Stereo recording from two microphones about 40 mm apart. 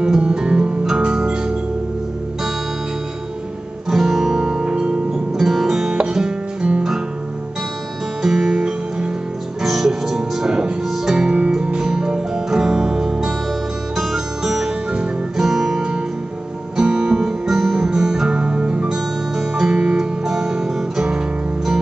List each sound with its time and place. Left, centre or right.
0.2 s music: right
3.9 s music: centre; by 5.2 s right
5.4 s music: centre
8.2 s music: centre
16.7 s guitar: centre
18.9 s music: centre
20.2 s guitar: centre